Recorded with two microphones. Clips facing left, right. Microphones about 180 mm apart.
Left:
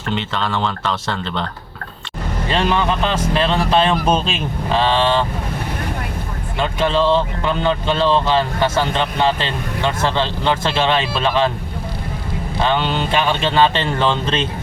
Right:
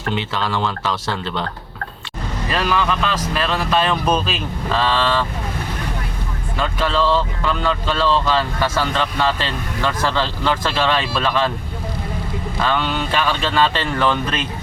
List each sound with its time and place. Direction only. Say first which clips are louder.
0.1 s speech: left 1 dB; 10° right (ahead or behind)
2.5 s speech: left 2 dB; 25° left (ahead or behind)
6.6 s speech: left 2 dB; 20° left (ahead or behind)
12.6 s speech: left 2 dB; 20° left (ahead or behind)